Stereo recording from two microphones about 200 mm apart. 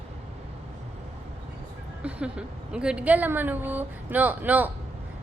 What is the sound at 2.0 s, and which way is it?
A woman's voice, 5° right (ahead or behind).